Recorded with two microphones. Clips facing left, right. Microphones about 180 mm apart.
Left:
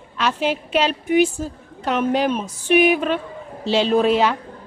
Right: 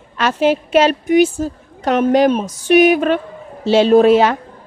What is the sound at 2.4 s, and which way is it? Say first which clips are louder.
Speech: right 5 dB; 65° right (ahead or behind).